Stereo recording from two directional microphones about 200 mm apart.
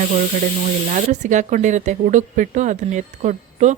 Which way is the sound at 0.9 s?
35° right (ahead or behind).